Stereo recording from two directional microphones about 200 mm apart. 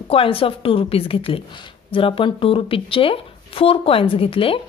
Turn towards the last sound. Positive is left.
turn(degrees=25)  # may be behind; listen again after turning